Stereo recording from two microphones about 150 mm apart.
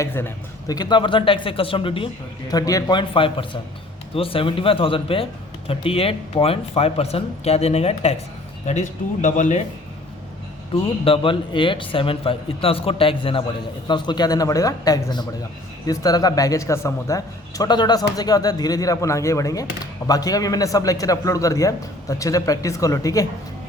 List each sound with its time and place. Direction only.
0.0 s a man's voice: 15° left (ahead or behind)
0.8 s speech: 30° left (ahead or behind)
2.5 s a man's voice: 25° left (ahead or behind)
2.9 s speech: 35° left (ahead or behind)
8.6 s speech: 55° left (ahead or behind)
11.0 s a man's voice: 35° left (ahead or behind)